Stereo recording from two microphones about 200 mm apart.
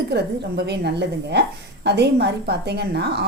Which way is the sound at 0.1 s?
55° right (ahead or behind).